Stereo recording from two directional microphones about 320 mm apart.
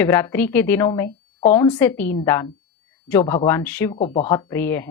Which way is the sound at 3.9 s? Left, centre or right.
Centre.